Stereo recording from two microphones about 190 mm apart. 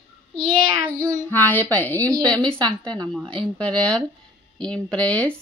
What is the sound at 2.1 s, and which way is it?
Speech, 20° right (ahead or behind).